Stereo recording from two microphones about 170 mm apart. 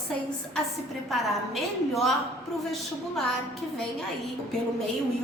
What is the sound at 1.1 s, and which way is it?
A woman's voice, centre (ahead or behind).